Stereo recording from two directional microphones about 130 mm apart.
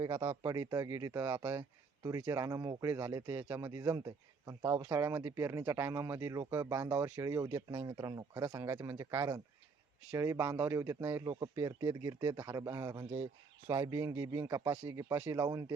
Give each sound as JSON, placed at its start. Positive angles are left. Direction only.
{"t": 0.4, "sound": "speech", "side_deg": -25}